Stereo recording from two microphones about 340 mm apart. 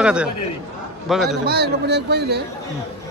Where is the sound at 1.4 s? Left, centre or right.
Right.